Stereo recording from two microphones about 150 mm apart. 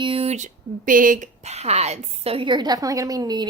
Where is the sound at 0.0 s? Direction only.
40° right (ahead or behind); by 1.3 s 65° right (ahead or behind).